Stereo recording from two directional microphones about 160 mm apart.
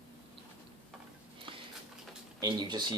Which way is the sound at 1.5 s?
35° right (ahead or behind).